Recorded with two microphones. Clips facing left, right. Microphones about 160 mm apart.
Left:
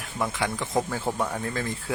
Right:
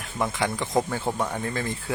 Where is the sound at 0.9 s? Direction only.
Centre (ahead or behind).